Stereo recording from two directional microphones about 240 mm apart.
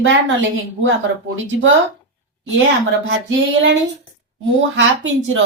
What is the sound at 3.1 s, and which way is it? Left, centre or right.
A woman's voice, right.